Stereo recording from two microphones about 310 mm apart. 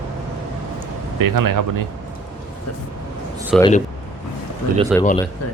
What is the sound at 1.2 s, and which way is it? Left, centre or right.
Speech, right.